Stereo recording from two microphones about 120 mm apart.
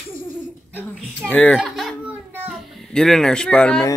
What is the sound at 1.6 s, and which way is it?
A child's voice, centre (ahead or behind).